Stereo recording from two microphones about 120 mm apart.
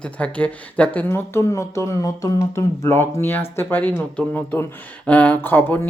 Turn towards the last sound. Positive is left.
turn(degrees=15)  # may be behind; listen again after turning